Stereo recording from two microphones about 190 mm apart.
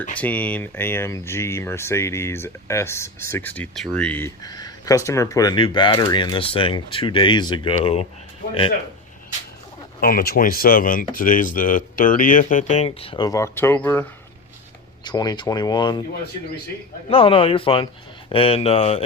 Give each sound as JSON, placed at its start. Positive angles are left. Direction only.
{"t": 0.2, "sound": "speech", "side_deg": 5}
{"t": 4.4, "sound": "speech", "side_deg": 20}
{"t": 10.0, "sound": "speech", "side_deg": 50}
{"t": 17.1, "sound": "speech", "side_deg": 30}